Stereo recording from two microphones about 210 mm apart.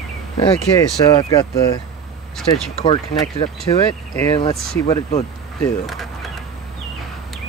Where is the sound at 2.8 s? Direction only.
25° left (ahead or behind).